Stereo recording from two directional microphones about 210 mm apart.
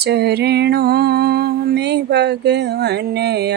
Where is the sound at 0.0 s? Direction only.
50° right (ahead or behind).